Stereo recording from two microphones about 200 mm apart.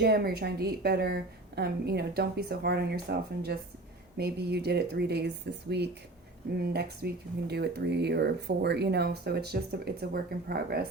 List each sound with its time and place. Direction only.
0.0 s speech: 55° right (ahead or behind)